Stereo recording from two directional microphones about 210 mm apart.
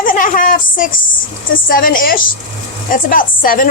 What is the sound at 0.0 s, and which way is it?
A woman's voice, 40° left (ahead or behind).